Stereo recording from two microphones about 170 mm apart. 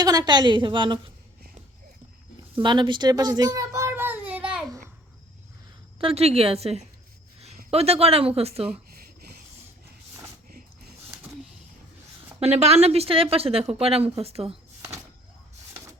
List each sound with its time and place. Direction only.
0.0 s a woman's voice: 20° right (ahead or behind)
2.6 s baby cry: 30° right (ahead or behind); by 4.6 s 10° right (ahead or behind)
6.0 s a woman's voice: 35° right (ahead or behind)
12.4 s a woman's voice: 40° right (ahead or behind)